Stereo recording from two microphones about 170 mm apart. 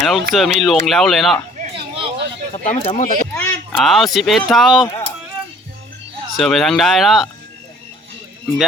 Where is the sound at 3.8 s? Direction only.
Centre (ahead or behind).